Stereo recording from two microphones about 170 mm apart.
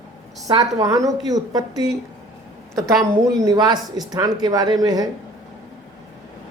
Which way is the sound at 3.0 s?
20° right (ahead or behind).